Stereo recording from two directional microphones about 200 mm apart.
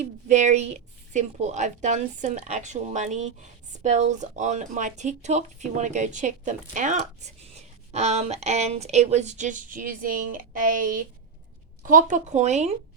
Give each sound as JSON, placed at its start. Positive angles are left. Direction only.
{"t": 0.0, "sound": "a woman's voice", "side_deg": -35}